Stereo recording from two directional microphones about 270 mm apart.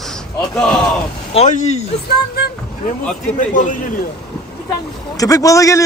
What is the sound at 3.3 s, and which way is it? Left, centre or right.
Speech, left.